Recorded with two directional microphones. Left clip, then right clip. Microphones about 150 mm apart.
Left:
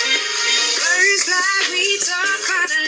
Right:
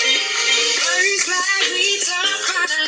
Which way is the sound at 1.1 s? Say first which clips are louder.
Left 1 dB; 5° left (ahead or behind).